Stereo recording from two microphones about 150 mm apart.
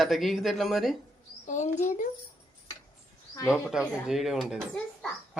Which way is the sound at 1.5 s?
55° left (ahead or behind).